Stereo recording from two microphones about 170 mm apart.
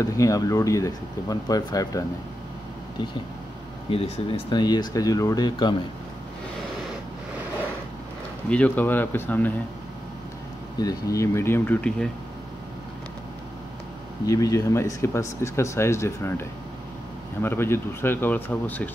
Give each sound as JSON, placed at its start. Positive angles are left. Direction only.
{"t": 0.0, "sound": "speech", "side_deg": 20}
{"t": 3.9, "sound": "speech", "side_deg": 35}
{"t": 8.5, "sound": "speech", "side_deg": 10}
{"t": 10.8, "sound": "speech", "side_deg": 20}
{"t": 14.2, "sound": "speech", "side_deg": 20}